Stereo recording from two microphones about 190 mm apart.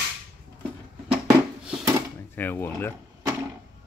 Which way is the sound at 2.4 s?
10° left (ahead or behind).